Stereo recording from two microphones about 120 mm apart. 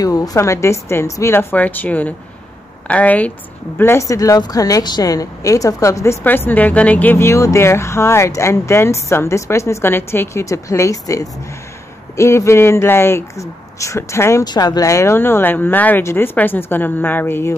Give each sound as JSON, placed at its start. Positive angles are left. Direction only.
{"t": 0.0, "sound": "a woman's voice", "side_deg": 30}
{"t": 14.4, "sound": "a woman's voice", "side_deg": 35}